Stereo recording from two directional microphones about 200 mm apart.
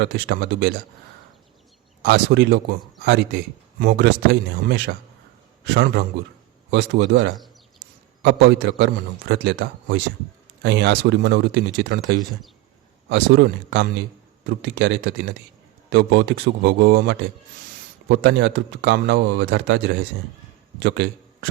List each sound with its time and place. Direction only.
0.0 s a man's voice: 55° right (ahead or behind)
2.0 s a man's voice: 55° right (ahead or behind)